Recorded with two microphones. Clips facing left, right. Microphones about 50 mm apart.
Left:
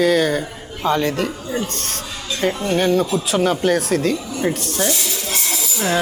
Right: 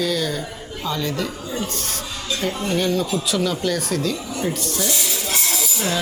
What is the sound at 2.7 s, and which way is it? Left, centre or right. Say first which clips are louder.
Speech: left 4 dB; left.